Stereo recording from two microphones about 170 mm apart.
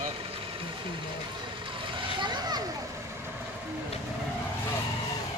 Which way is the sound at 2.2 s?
25° right (ahead or behind).